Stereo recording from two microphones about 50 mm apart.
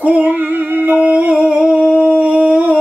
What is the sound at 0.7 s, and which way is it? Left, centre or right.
Humming, right.